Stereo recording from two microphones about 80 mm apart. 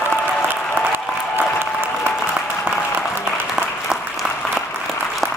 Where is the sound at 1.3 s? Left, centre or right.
Right.